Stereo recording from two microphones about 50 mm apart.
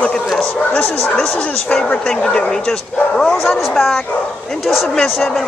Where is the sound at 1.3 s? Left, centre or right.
Centre.